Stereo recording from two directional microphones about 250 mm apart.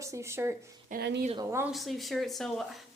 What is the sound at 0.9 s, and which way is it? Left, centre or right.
Speech, right.